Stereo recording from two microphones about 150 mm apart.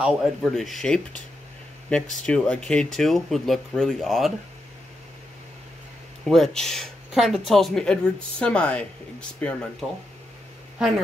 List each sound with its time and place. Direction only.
0.0 s speech: centre (ahead or behind)
2.2 s speech: 10° left (ahead or behind)
6.2 s speech: centre (ahead or behind)